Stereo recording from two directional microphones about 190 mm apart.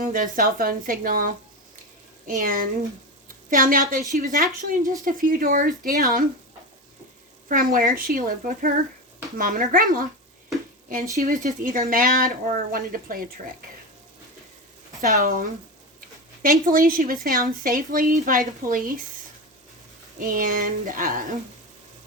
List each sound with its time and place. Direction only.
0.0 s a woman's voice: 45° right (ahead or behind)
7.4 s a woman's voice: 45° right (ahead or behind)
11.2 s a woman's voice: 40° right (ahead or behind)
15.1 s a woman's voice: 40° right (ahead or behind)
20.1 s a woman's voice: 45° right (ahead or behind)